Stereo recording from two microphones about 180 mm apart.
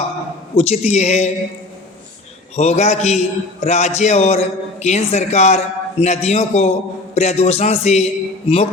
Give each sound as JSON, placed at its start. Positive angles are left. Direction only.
{"t": 0.5, "sound": "a man's voice", "side_deg": 35}
{"t": 2.6, "sound": "a man's voice", "side_deg": 40}